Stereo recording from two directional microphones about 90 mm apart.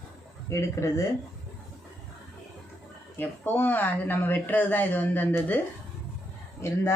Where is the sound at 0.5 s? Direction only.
35° left (ahead or behind).